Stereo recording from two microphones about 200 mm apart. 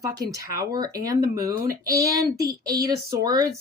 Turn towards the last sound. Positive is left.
turn(degrees=-20)  # may be behind; listen again after turning